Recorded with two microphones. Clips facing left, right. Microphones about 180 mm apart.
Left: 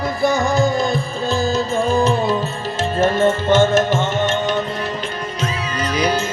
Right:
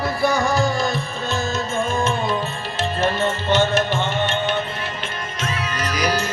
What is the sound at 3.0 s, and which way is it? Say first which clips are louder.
Music: left 7 dB; 45° left (ahead or behind).